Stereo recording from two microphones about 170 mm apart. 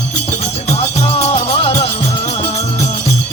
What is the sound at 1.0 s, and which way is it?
Music, 35° left (ahead or behind).